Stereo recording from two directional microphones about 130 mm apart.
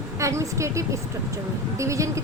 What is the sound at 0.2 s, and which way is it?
A woman's voice, 25° right (ahead or behind).